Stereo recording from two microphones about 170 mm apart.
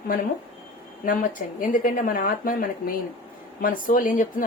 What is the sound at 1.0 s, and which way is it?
Speech, 55° left (ahead or behind).